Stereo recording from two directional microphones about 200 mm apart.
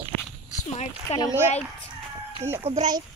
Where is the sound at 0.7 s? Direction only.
35° left (ahead or behind).